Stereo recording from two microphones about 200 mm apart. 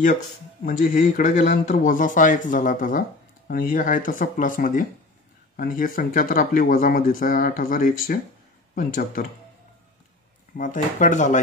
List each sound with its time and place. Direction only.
0.7 s speech: 40° left (ahead or behind)
10.6 s speech: 40° left (ahead or behind)